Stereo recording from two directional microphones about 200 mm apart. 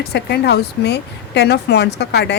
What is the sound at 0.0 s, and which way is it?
Speech, 55° left (ahead or behind).